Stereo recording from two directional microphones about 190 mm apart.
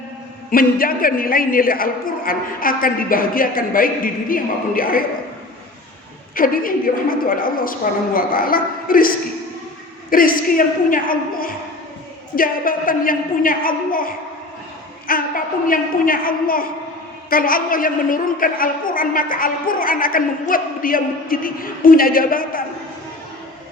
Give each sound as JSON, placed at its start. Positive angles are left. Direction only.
{"t": 0.5, "sound": "a woman's voice", "side_deg": 50}
{"t": 6.3, "sound": "a woman's voice", "side_deg": 50}
{"t": 15.1, "sound": "a sound", "side_deg": 50}
{"t": 15.6, "sound": "a woman's voice", "side_deg": 45}